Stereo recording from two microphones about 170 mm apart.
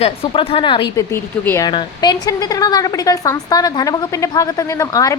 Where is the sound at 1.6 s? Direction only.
25° left (ahead or behind).